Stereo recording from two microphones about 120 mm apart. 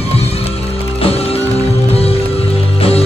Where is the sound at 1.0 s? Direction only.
55° left (ahead or behind).